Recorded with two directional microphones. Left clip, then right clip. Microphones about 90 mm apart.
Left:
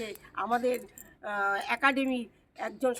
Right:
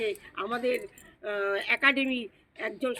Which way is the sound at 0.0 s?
40° left (ahead or behind).